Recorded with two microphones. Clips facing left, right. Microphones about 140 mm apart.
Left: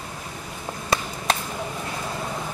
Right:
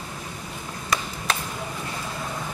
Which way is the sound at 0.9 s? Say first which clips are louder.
Left 2 dB; 30° left (ahead or behind).